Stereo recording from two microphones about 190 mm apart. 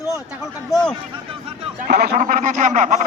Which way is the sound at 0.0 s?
15° left (ahead or behind).